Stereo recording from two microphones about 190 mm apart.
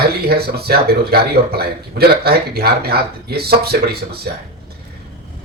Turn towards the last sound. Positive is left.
turn(degrees=-55)  # may be behind; listen again after turning